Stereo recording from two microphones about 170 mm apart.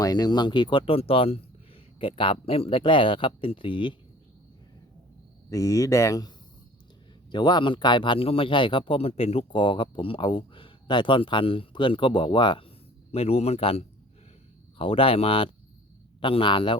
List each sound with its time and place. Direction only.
0.0 s speech: 25° left (ahead or behind)
5.5 s speech: 20° left (ahead or behind)